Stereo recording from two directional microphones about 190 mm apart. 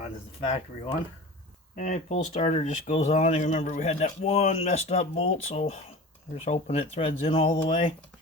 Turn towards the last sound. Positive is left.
turn(degrees=30)  # may be behind; listen again after turning